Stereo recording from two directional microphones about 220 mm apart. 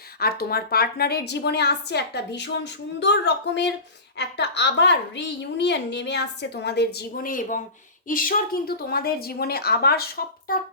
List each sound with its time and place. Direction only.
0.2 s a child's voice: 45° left (ahead or behind)